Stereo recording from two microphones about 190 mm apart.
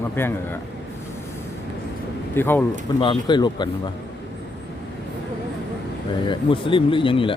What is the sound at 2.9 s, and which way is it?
Speech, 25° left (ahead or behind).